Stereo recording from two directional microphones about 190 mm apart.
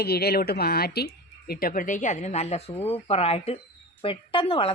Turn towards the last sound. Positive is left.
turn(degrees=30)  # may be behind; listen again after turning